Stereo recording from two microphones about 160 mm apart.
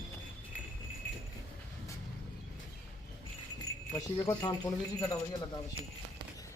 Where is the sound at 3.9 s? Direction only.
20° left (ahead or behind).